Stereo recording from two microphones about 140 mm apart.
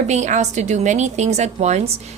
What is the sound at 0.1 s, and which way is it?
A woman's voice, 60° right (ahead or behind).